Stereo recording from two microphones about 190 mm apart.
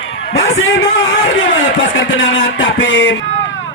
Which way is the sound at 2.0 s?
75° left (ahead or behind).